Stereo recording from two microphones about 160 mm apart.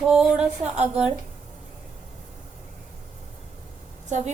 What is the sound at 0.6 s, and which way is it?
Speech, 45° right (ahead or behind).